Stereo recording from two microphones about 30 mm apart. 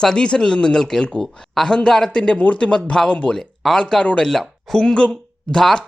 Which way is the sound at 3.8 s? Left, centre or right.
Left.